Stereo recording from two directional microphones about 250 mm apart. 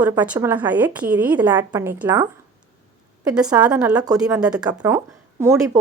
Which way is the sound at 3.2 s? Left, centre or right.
Centre.